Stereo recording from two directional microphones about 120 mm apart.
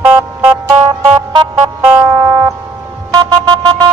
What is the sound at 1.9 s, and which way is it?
Music, 20° right (ahead or behind).